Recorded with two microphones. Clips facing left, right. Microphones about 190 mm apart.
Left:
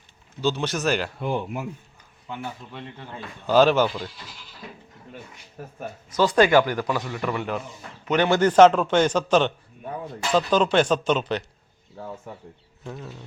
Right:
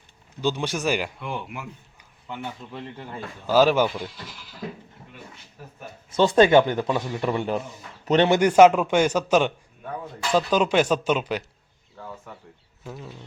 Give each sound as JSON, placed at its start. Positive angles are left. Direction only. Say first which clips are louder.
{"t": 0.4, "sound": "a man's voice", "louder": "left 1 dB", "side_deg": -10}
{"t": 1.2, "sound": "speech", "louder": "left 6 dB", "side_deg": 35}
{"t": 3.4, "sound": "a man's voice", "louder": "left 1 dB", "side_deg": -5}
{"t": 5.6, "sound": "speech", "louder": "left 6 dB", "side_deg": 50}
{"t": 6.1, "sound": "a man's voice", "louder": "right 2 dB", "side_deg": -25}
{"t": 8.4, "sound": "a man's voice", "louder": "left 2 dB", "side_deg": -10}
{"t": 11.9, "sound": "speech", "louder": "left 3 dB", "side_deg": 25}
{"t": 12.8, "sound": "a man's voice", "louder": "left 1 dB", "side_deg": -5}